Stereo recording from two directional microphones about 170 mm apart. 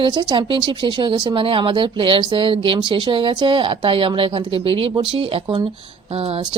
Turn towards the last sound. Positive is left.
turn(degrees=-35)  # may be behind; listen again after turning